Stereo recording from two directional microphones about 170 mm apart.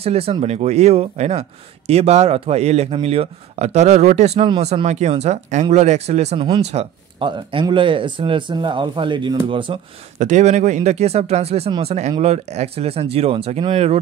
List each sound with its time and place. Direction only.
0.0 s speech: 35° right (ahead or behind)
10.1 s speech: 45° right (ahead or behind)